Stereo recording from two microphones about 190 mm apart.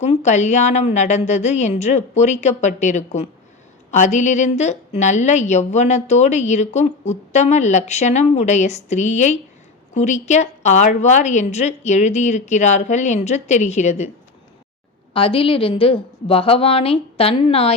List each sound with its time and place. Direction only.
0.0 s a woman's voice: 35° left (ahead or behind)
15.1 s a woman's voice: 30° left (ahead or behind)